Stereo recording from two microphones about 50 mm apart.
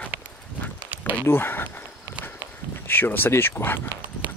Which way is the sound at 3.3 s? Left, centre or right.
Left.